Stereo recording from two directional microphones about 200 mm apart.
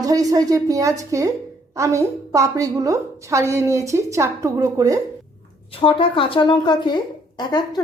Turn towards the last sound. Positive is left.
turn(degrees=20)  # may be behind; listen again after turning